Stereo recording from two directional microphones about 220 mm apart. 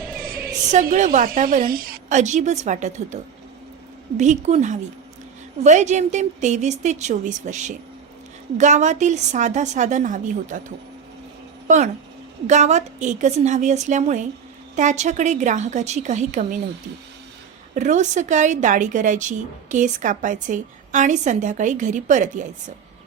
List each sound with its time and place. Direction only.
0.7 s a woman's voice: 35° right (ahead or behind)
4.2 s a woman's voice: 30° right (ahead or behind)
11.7 s a woman's voice: 35° right (ahead or behind)
17.7 s a woman's voice: 35° right (ahead or behind)